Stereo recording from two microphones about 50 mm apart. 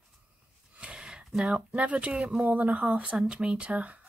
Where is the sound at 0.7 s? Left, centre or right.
Centre.